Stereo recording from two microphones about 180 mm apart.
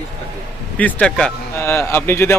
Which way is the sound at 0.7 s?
5° left (ahead or behind).